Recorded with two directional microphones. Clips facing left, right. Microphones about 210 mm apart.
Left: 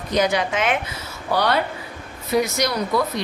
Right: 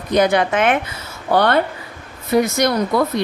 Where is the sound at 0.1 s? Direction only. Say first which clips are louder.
Right 5 dB; 55° right (ahead or behind).